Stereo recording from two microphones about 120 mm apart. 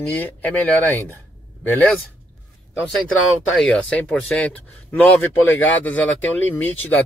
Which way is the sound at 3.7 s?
10° left (ahead or behind).